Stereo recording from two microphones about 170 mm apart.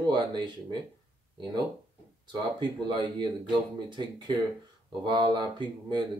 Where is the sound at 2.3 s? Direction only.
25° right (ahead or behind).